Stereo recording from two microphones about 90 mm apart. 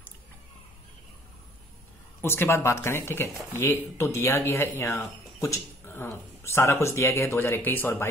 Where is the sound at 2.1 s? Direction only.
25° left (ahead or behind).